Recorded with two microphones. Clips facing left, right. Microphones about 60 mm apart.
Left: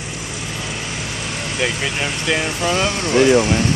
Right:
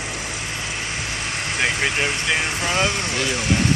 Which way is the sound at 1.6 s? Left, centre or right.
Right.